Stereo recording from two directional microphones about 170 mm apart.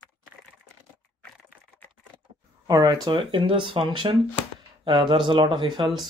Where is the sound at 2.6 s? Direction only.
20° right (ahead or behind).